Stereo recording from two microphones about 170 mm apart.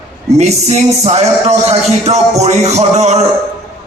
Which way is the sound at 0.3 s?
40° right (ahead or behind).